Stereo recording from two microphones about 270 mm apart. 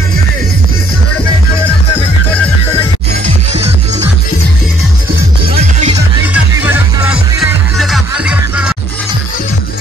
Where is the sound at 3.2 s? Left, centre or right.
Right.